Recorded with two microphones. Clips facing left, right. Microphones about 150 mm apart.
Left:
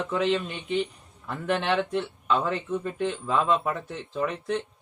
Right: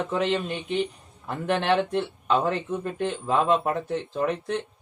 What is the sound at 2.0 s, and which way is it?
Speech, 35° right (ahead or behind).